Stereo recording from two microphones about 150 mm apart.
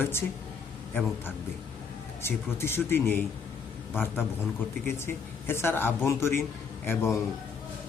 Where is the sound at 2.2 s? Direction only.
15° left (ahead or behind).